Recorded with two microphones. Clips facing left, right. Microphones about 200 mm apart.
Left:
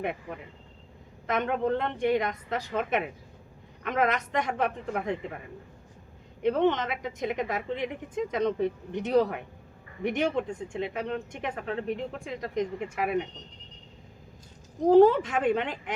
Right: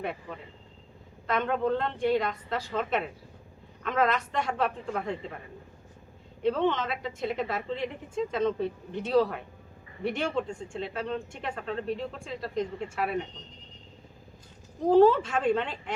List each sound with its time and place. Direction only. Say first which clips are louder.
0.0 s a woman's voice: left 2 dB; 15° left (ahead or behind)
6.4 s a woman's voice: left 2 dB; 15° left (ahead or behind)
14.8 s a woman's voice: left 2 dB; 15° left (ahead or behind)